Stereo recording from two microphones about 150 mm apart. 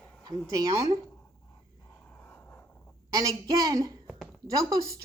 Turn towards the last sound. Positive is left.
turn(degrees=-20)  # may be behind; listen again after turning